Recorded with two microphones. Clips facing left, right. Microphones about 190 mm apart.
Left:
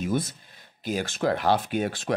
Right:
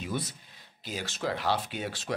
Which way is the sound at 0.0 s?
50° left (ahead or behind).